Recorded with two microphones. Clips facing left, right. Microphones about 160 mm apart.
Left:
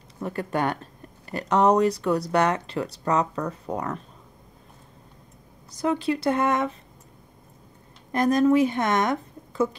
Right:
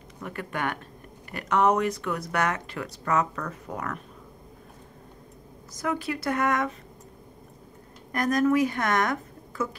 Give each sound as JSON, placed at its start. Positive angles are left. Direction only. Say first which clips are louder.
{"t": 0.2, "sound": "speech", "louder": "left 5 dB", "side_deg": 30}
{"t": 5.8, "sound": "speech", "louder": "left 5 dB", "side_deg": 30}
{"t": 8.1, "sound": "speech", "louder": "left 4 dB", "side_deg": 25}